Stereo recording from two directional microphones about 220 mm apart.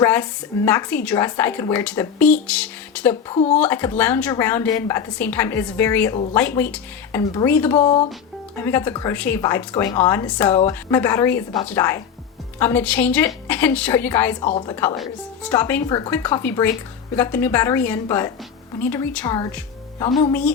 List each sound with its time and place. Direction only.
0.0 s a woman's voice: 10° left (ahead or behind)
3.2 s speech: 30° left (ahead or behind)
3.6 s a woman's voice: 10° left (ahead or behind)
14.9 s speech: centre (ahead or behind)
15.5 s a woman's voice: 10° left (ahead or behind)